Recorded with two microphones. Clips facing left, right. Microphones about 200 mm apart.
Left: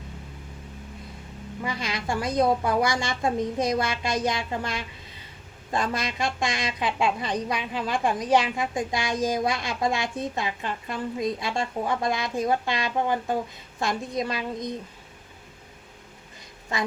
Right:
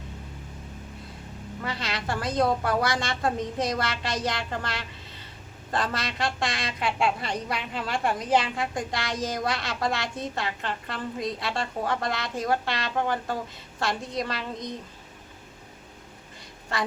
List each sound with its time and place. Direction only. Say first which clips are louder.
1.6 s a woman's voice: left 2 dB; 15° left (ahead or behind)